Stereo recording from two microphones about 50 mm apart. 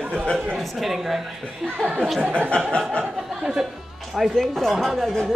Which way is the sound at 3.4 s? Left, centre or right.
Centre.